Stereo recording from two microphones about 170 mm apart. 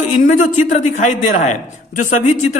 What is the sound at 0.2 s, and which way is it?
A woman's voice, 50° left (ahead or behind).